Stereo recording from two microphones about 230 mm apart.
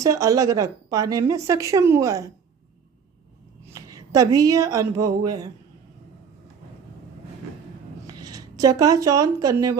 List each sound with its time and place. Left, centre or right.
0.0 s a woman's voice: centre
3.7 s a woman's voice: centre
8.0 s speech: centre